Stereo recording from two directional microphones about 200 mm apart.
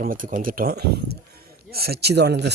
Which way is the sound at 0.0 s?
45° right (ahead or behind).